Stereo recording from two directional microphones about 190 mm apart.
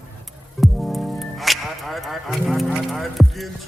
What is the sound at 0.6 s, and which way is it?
Music, centre (ahead or behind).